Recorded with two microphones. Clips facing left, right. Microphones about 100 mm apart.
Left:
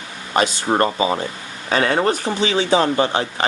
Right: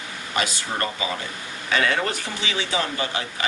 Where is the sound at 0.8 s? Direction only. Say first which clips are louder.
Left 8 dB; 35° left (ahead or behind).